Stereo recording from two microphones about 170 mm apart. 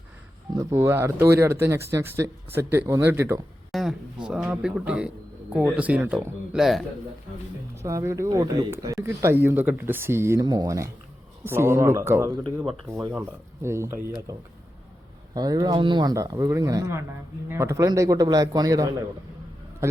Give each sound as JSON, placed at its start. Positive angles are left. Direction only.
{"t": 0.5, "sound": "speech", "side_deg": -15}
{"t": 3.7, "sound": "speech", "side_deg": 0}
{"t": 7.8, "sound": "speech", "side_deg": -15}
{"t": 15.4, "sound": "speech", "side_deg": -25}